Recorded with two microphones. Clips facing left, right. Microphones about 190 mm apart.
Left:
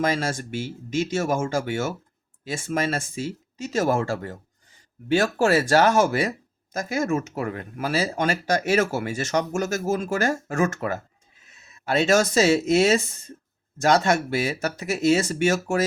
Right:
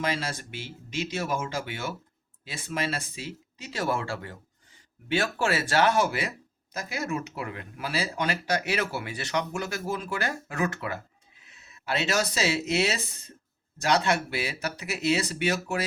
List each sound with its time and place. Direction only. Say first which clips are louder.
0.0 s speech: left 6 dB; 45° left (ahead or behind)